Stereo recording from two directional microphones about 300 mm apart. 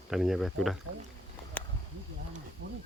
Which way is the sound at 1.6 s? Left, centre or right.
Centre.